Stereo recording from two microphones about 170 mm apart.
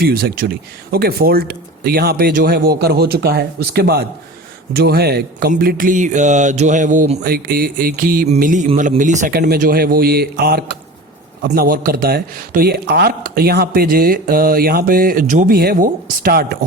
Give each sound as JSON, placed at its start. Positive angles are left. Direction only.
{"t": 0.0, "sound": "speech", "side_deg": -65}
{"t": 8.6, "sound": "speech", "side_deg": -35}
{"t": 9.0, "sound": "speech", "side_deg": -50}
{"t": 9.4, "sound": "speech", "side_deg": -60}